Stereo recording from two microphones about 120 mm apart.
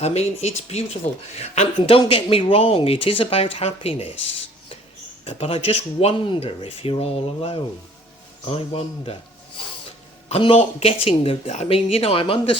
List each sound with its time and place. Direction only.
0.0 s speech: 65° left (ahead or behind)
5.2 s speech: 55° left (ahead or behind)
10.2 s speech: 55° left (ahead or behind)